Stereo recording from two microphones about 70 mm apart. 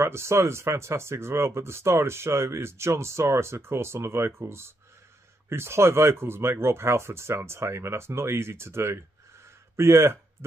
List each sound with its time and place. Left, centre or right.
0.0 s speech: right